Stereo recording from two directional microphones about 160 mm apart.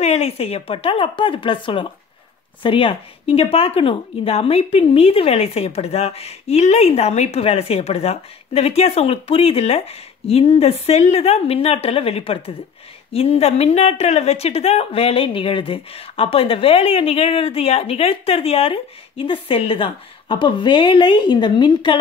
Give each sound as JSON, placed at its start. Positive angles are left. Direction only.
{"t": 0.0, "sound": "a woman's voice", "side_deg": 40}